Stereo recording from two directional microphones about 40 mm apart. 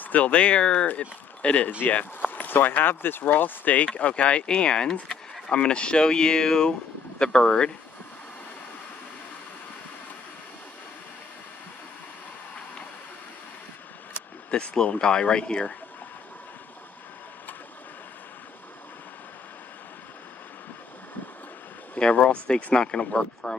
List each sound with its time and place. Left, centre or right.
0.0 s speech: left
2.2 s speech: left
3.7 s speech: left
14.5 s speech: left
21.9 s speech: left